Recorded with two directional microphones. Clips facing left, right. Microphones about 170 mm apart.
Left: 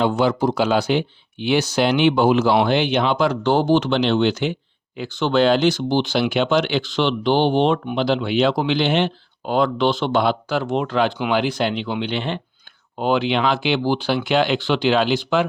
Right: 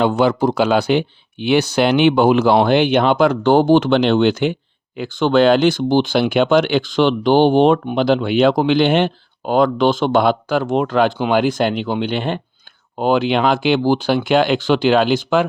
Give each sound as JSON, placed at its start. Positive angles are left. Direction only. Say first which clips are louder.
{"t": 0.0, "sound": "speech", "louder": "right 3 dB", "side_deg": -60}